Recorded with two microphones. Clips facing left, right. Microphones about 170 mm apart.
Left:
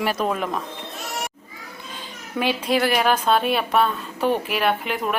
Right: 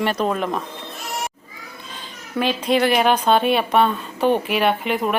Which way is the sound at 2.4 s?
10° left (ahead or behind).